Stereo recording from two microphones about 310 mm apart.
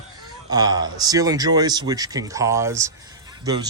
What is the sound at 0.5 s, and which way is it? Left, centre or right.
Speech, centre.